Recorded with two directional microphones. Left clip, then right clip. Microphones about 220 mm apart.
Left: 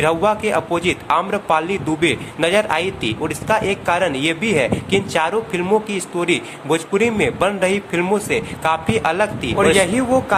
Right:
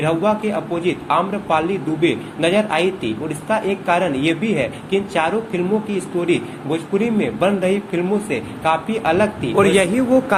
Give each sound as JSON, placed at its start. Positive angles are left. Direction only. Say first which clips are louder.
{"t": 0.0, "sound": "a man's voice", "louder": "left 2 dB", "side_deg": 30}
{"t": 9.6, "sound": "a man's voice", "louder": "even", "side_deg": 0}